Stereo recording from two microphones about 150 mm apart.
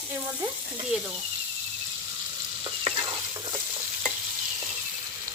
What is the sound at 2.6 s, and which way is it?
Stir, 35° right (ahead or behind).